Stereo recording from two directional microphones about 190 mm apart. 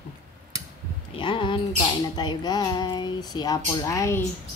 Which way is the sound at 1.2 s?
25° left (ahead or behind).